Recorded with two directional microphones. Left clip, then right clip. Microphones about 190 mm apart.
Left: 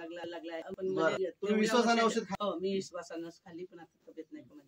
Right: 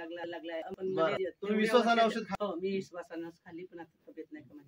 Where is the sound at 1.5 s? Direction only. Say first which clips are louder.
Right 1 dB; centre (ahead or behind).